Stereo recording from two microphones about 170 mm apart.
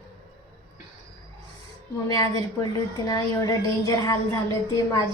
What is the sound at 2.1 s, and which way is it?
A woman's voice, 20° left (ahead or behind).